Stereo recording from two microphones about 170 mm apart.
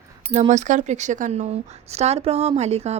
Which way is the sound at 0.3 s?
45° right (ahead or behind).